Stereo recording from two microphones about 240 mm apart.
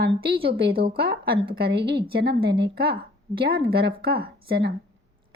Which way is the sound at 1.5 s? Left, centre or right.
Right.